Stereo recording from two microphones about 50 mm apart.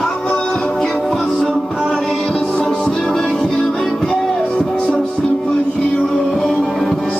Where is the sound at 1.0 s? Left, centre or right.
Centre.